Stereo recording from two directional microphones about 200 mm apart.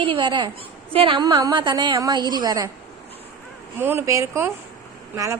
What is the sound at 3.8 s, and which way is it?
Speech, 10° right (ahead or behind).